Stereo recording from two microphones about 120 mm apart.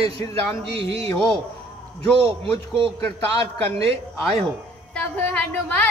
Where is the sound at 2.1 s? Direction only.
50° right (ahead or behind).